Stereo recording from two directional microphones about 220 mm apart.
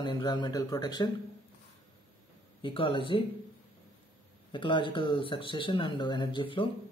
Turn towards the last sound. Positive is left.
turn(degrees=25)  # may be behind; listen again after turning